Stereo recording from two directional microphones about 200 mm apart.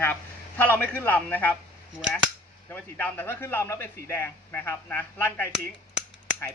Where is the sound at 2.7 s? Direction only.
10° left (ahead or behind).